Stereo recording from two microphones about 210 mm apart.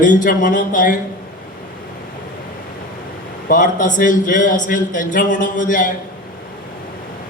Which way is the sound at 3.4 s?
40° left (ahead or behind).